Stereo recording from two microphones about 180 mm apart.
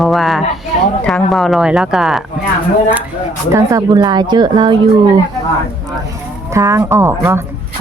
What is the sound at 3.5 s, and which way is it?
Speech, 15° right (ahead or behind).